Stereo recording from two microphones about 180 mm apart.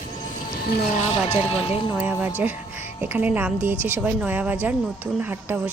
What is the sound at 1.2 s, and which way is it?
Speech, 30° left (ahead or behind).